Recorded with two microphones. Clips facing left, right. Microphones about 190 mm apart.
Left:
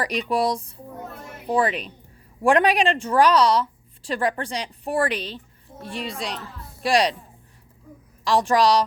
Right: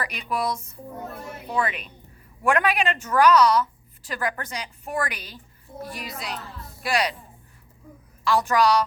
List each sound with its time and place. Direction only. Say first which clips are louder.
0.0 s a woman's voice: left 5 dB; 35° left (ahead or behind)
8.2 s a woman's voice: left 2 dB; 35° left (ahead or behind)